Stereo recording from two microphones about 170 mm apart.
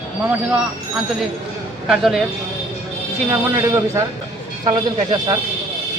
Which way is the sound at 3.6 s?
15° right (ahead or behind).